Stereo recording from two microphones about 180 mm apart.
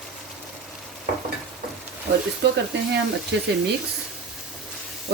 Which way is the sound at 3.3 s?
70° right (ahead or behind).